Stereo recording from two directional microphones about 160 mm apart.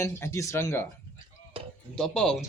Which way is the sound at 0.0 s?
15° left (ahead or behind).